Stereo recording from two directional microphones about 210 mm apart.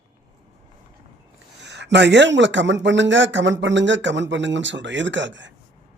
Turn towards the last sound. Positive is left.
turn(degrees=-60)  # may be behind; listen again after turning